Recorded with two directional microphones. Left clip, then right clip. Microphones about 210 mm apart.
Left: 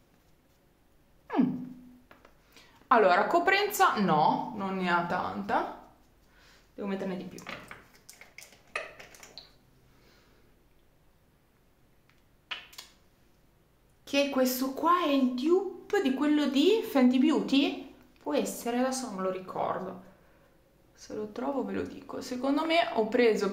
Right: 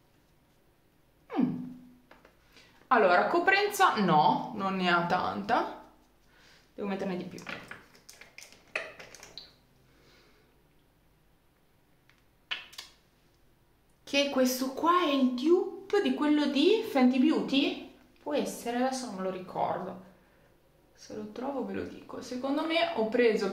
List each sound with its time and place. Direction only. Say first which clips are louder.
2.5 s a woman's voice: left 2 dB; 20° left (ahead or behind); by 5.6 s 10° right (ahead or behind)
6.8 s a woman's voice: right 1 dB; 5° right (ahead or behind)
12.5 s finger snapping: right 2 dB; centre (ahead or behind)
14.0 s a woman's voice: even; 5° left (ahead or behind)
20.9 s speech: left 4 dB; 20° left (ahead or behind)